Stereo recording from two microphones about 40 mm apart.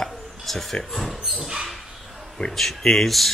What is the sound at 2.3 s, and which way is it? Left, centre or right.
Speech, centre.